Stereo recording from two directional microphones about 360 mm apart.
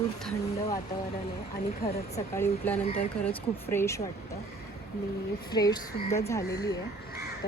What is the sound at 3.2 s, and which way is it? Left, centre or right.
Speech, centre.